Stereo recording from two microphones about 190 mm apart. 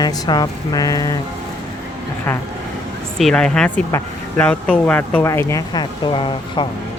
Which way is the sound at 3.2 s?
5° left (ahead or behind).